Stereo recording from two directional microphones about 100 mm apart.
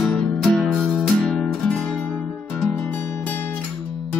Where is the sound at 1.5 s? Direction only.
10° left (ahead or behind).